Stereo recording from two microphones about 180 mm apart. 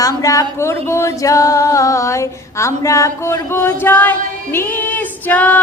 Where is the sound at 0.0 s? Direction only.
20° left (ahead or behind).